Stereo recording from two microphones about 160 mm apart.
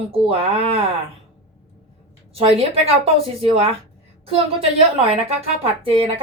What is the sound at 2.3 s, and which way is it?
A woman's voice, 35° right (ahead or behind).